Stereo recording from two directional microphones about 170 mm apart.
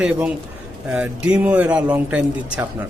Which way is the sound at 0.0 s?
5° right (ahead or behind).